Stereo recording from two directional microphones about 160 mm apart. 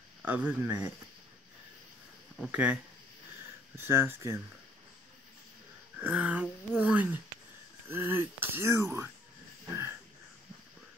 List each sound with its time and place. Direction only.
0.2 s speech: 10° right (ahead or behind)
2.3 s speech: 5° right (ahead or behind)
5.9 s speech: 10° right (ahead or behind)